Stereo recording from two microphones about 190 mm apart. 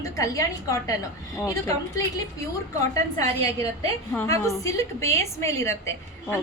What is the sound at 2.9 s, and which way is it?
A woman's voice, 15° left (ahead or behind).